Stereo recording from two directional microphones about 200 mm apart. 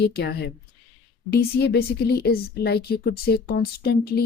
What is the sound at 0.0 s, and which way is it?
A woman's voice, 50° left (ahead or behind).